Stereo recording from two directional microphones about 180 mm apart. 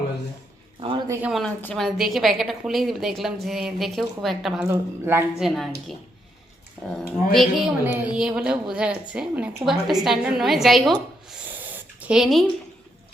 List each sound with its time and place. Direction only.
0.8 s a sound: 25° right (ahead or behind)
1.3 s a woman's voice: centre (ahead or behind)
4.7 s speech: 15° right (ahead or behind)
5.4 s a woman's voice: centre (ahead or behind)
7.3 s a woman's voice: 5° right (ahead or behind)